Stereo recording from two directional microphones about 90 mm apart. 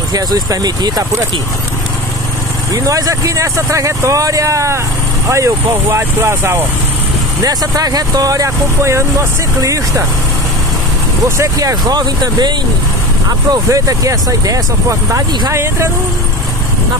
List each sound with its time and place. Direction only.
0.1 s speech: 45° right (ahead or behind)
2.7 s speech: 40° right (ahead or behind)
7.4 s speech: 45° right (ahead or behind)
11.2 s speech: 35° right (ahead or behind)